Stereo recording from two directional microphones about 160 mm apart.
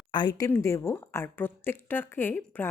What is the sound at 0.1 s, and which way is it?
A woman's voice, 25° left (ahead or behind).